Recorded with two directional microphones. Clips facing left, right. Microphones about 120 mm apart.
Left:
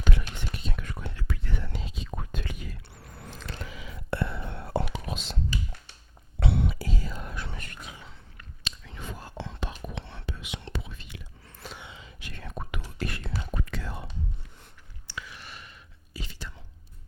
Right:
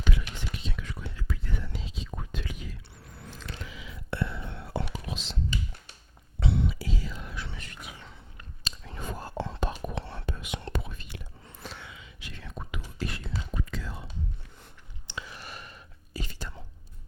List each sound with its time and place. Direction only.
0.0 s whispering: 50° left (ahead or behind)
5.0 s computer keyboard: 50° left (ahead or behind)
6.4 s whispering: 60° left (ahead or behind)
8.6 s whispering: 40° right (ahead or behind)
11.8 s whispering: 30° left (ahead or behind)
12.2 s whispering: 50° left (ahead or behind)
15.0 s whispering: 30° right (ahead or behind); by 16.5 s 45° right (ahead or behind)